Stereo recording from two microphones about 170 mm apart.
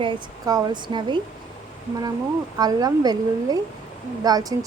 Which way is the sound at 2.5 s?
25° right (ahead or behind).